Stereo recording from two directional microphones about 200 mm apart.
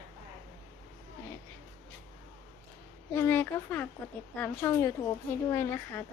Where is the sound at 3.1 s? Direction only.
10° left (ahead or behind).